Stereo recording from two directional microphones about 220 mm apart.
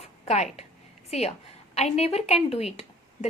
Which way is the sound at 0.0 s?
30° left (ahead or behind).